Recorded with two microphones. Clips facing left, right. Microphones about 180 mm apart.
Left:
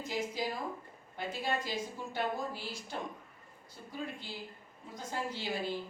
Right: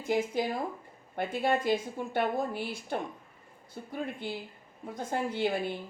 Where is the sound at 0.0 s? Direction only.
55° right (ahead or behind).